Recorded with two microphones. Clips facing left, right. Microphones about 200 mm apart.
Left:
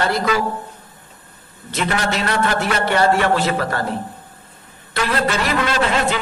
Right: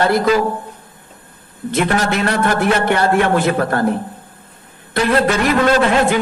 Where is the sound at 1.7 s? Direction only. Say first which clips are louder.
Right 4 dB; 55° right (ahead or behind).